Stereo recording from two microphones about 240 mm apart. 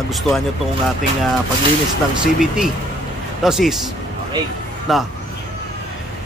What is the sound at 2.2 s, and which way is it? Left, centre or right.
Speech, centre.